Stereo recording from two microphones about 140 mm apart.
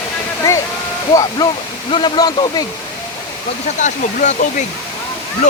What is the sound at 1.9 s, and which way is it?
Speech, 35° left (ahead or behind).